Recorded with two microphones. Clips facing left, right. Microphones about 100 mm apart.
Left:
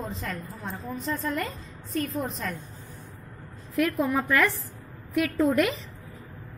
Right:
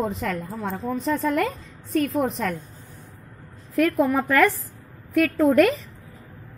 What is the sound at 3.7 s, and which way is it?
A woman's voice, 45° right (ahead or behind).